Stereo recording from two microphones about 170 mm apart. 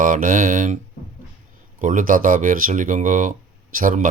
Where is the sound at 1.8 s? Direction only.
50° right (ahead or behind).